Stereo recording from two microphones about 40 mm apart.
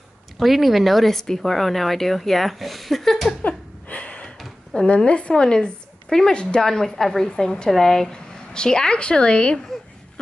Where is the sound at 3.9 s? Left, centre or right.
Left.